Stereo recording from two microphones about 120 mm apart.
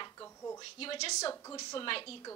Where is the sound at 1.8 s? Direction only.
50° left (ahead or behind).